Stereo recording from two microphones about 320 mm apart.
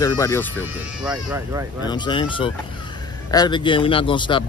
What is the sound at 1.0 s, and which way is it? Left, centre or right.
Speech, centre.